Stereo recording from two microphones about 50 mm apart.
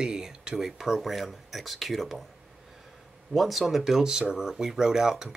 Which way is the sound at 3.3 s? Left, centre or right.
Centre.